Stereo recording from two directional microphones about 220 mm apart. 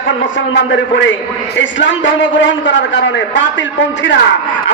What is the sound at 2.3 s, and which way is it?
A man's voice, 55° left (ahead or behind).